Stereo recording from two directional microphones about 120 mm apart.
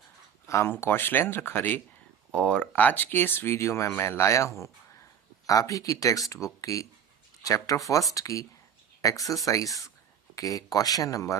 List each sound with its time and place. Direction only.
0.4 s speech: 20° left (ahead or behind)